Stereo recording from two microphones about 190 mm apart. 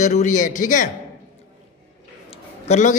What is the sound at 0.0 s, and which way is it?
Speech, 40° left (ahead or behind).